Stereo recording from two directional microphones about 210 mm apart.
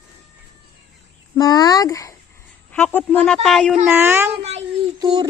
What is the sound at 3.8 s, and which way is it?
Speech, 10° right (ahead or behind).